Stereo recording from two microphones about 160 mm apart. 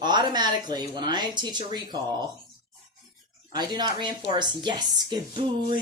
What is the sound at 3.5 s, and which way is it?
Speech, 25° right (ahead or behind).